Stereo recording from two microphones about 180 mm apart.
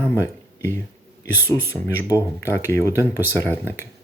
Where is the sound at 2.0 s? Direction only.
15° left (ahead or behind).